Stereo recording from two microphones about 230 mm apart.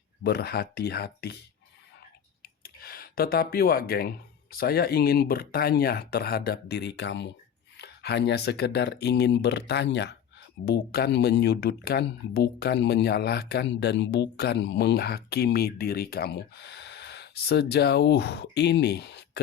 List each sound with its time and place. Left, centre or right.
0.2 s speech: left
2.4 s a sound: left
4.5 s speech: left